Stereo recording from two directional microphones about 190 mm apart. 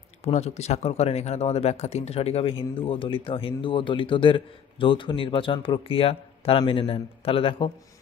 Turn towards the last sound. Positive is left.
turn(degrees=30)  # may be behind; listen again after turning